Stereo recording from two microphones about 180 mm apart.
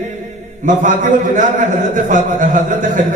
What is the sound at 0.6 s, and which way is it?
A man's voice, 45° right (ahead or behind).